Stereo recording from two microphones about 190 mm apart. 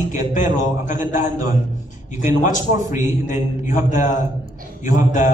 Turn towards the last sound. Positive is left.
turn(degrees=40)  # may be behind; listen again after turning